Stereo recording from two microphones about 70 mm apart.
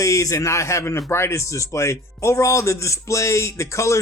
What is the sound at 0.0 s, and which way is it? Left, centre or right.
A man's voice, left.